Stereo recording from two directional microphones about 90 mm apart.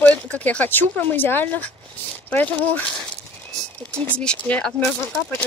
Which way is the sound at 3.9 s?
15° left (ahead or behind).